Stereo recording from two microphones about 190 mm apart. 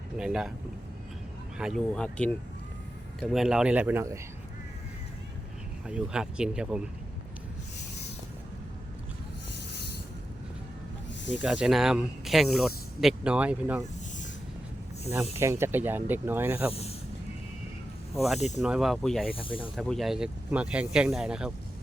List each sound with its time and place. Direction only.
0.2 s speech: 5° right (ahead or behind)
1.5 s speech: centre (ahead or behind)
5.9 s speech: 5° right (ahead or behind)
11.4 s speech: 5° right (ahead or behind)
15.4 s speech: 15° right (ahead or behind)
18.1 s speech: centre (ahead or behind)
18.3 s speech: 35° left (ahead or behind)
18.6 s speech: 5° right (ahead or behind)
19.4 s speech: 25° left (ahead or behind)
19.7 s speech: centre (ahead or behind)